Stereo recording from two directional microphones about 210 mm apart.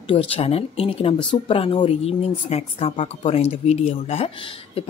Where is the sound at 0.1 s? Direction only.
25° left (ahead or behind).